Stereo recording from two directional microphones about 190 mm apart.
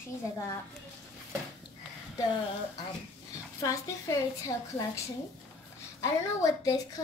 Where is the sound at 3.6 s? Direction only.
15° left (ahead or behind).